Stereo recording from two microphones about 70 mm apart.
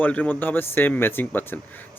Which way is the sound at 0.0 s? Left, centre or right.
Left.